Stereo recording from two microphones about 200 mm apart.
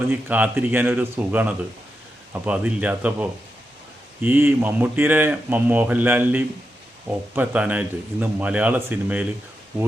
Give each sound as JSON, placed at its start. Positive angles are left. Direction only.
{"t": 0.1, "sound": "speech", "side_deg": -10}